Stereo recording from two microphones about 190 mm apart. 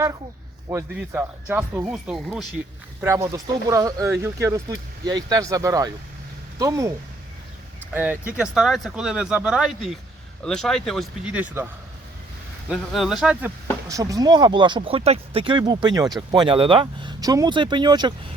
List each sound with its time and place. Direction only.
0.7 s speech: 10° right (ahead or behind)
3.0 s speech: 15° right (ahead or behind)
7.9 s speech: 10° right (ahead or behind)
13.8 s speech: 20° right (ahead or behind)